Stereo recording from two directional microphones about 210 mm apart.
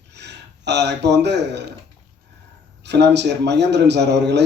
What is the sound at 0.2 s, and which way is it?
Speech, 55° right (ahead or behind).